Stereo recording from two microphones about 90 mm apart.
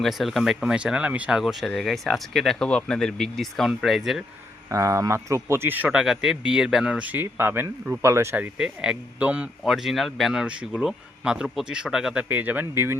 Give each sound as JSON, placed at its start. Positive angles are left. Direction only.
{"t": 0.0, "sound": "speech", "side_deg": 0}
{"t": 1.4, "sound": "speech", "side_deg": -5}
{"t": 4.7, "sound": "speech", "side_deg": -35}
{"t": 5.9, "sound": "speech", "side_deg": -5}
{"t": 7.1, "sound": "speech", "side_deg": -20}
{"t": 8.4, "sound": "speech", "side_deg": -10}
{"t": 9.6, "sound": "speech", "side_deg": -5}
{"t": 12.3, "sound": "speech", "side_deg": -20}